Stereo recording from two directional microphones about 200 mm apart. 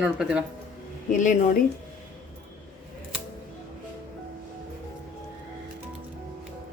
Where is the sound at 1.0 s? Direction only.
40° left (ahead or behind).